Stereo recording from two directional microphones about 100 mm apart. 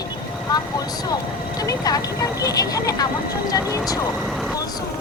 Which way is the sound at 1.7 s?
40° left (ahead or behind).